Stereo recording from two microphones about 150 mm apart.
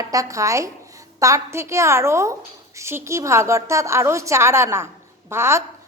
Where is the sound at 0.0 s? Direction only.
25° right (ahead or behind).